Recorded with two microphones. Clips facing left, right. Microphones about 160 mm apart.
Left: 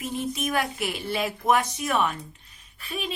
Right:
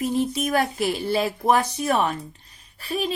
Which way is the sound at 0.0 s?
35° right (ahead or behind).